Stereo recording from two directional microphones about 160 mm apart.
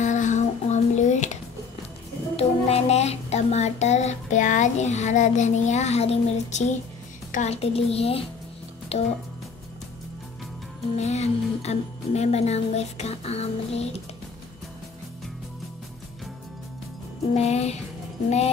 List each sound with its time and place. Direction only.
0.0 s music: 50° left (ahead or behind)
2.3 s child singing: 40° left (ahead or behind)
7.3 s speech: 40° left (ahead or behind)
11.0 s speech: 45° left (ahead or behind)
17.3 s speech: 40° left (ahead or behind)